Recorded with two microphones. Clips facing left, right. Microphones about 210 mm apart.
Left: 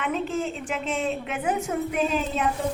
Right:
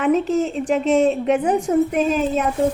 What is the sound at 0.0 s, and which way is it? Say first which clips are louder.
A woman's voice: right 9 dB; 40° right (ahead or behind).